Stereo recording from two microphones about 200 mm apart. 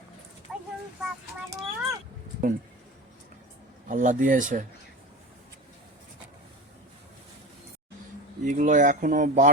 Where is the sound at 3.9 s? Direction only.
40° right (ahead or behind).